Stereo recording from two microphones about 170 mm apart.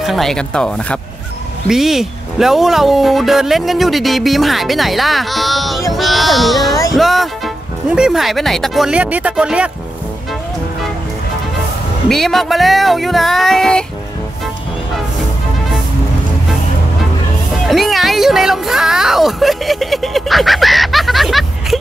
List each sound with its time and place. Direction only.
0.0 s speech: centre (ahead or behind)
12.1 s speech: centre (ahead or behind)
17.6 s speech: centre (ahead or behind)